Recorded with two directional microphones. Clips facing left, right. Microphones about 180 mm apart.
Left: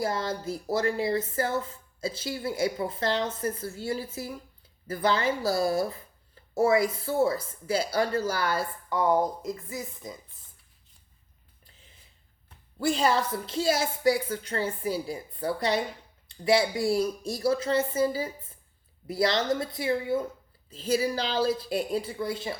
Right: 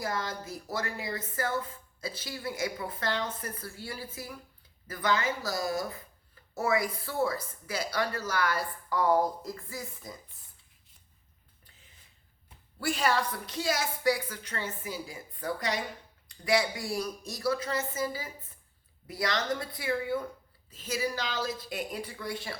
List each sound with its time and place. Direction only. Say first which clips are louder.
0.0 s speech: left 5 dB; 30° left (ahead or behind)
12.8 s speech: left 4 dB; 30° left (ahead or behind)